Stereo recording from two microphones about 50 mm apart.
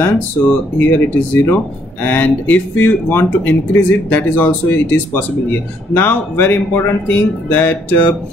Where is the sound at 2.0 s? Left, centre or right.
Left.